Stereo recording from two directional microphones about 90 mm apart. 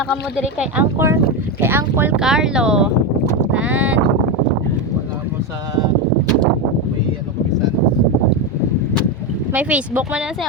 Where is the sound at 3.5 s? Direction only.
15° right (ahead or behind).